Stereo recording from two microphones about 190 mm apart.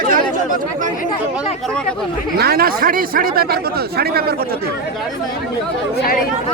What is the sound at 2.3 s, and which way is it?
Speech, 55° right (ahead or behind).